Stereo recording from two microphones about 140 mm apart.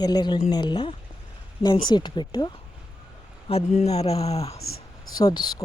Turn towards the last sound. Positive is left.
turn(degrees=30)  # may be behind; listen again after turning